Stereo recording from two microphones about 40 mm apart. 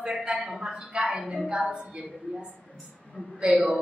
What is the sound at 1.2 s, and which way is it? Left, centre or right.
Speech, centre.